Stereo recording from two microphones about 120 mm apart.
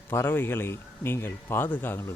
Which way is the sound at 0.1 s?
20° left (ahead or behind).